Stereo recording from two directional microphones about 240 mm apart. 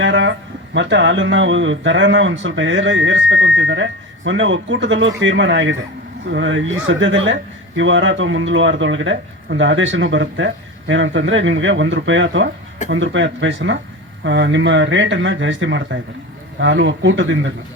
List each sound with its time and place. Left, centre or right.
0.0 s speech: right